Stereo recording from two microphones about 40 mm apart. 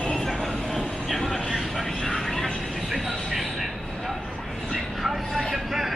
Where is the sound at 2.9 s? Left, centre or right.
Centre.